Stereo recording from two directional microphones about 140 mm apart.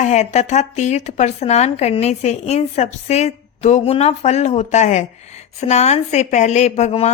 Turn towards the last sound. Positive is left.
turn(degrees=50)  # may be behind; listen again after turning